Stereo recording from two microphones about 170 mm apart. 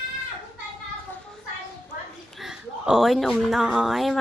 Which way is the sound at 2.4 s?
Centre (ahead or behind).